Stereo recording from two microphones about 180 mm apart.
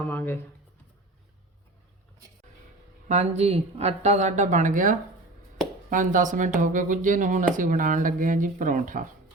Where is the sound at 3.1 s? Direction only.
35° right (ahead or behind).